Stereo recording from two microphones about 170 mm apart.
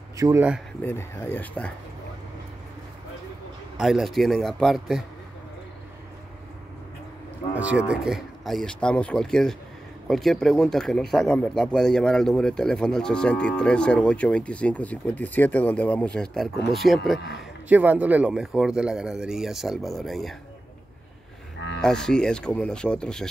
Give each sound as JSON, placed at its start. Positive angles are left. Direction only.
{"t": 0.2, "sound": "speech", "side_deg": -15}
{"t": 0.8, "sound": "speech", "side_deg": 15}
{"t": 3.7, "sound": "speech", "side_deg": 0}
{"t": 7.5, "sound": "speech", "side_deg": -10}
{"t": 21.8, "sound": "speech", "side_deg": 5}